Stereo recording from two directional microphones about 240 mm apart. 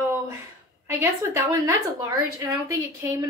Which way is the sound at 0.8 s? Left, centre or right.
Centre.